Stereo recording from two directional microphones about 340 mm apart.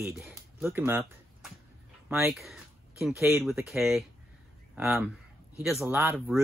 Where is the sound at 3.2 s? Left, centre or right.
Centre.